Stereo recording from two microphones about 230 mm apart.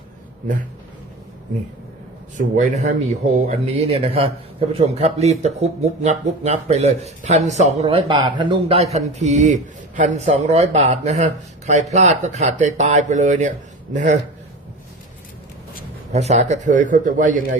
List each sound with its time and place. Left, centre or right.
2.6 s speech: right
16.1 s speech: right